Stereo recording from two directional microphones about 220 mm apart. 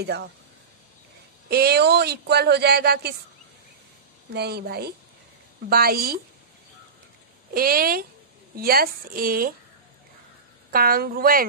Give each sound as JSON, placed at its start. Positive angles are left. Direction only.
{"t": 0.0, "sound": "speech", "side_deg": -50}
{"t": 1.5, "sound": "speech", "side_deg": -45}
{"t": 4.3, "sound": "speech", "side_deg": -45}
{"t": 7.5, "sound": "a woman's voice", "side_deg": -40}
{"t": 10.7, "sound": "speech", "side_deg": -40}